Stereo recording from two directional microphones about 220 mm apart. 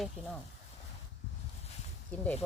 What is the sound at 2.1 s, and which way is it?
Speech, 5° left (ahead or behind).